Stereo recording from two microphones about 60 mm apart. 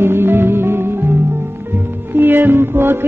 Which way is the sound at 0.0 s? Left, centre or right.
Right.